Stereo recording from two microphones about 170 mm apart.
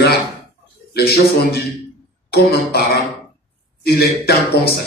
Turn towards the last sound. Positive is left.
turn(degrees=65)  # may be behind; listen again after turning